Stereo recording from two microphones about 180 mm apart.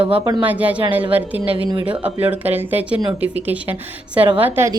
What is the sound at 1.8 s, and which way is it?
A woman's voice, 10° right (ahead or behind).